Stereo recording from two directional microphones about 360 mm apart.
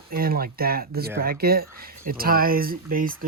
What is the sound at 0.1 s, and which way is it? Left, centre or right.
Speech, right.